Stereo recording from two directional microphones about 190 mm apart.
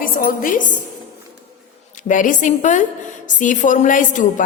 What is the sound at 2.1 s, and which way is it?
A woman's voice, 45° left (ahead or behind).